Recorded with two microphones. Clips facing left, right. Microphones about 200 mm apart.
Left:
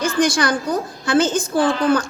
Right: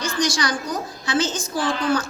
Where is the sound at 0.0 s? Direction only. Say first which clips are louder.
Left 5 dB; 55° left (ahead or behind).